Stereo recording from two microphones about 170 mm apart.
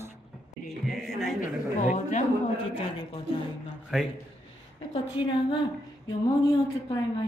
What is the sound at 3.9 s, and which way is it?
Speech, centre (ahead or behind).